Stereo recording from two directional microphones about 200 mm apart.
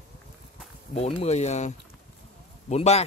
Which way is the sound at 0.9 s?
30° left (ahead or behind).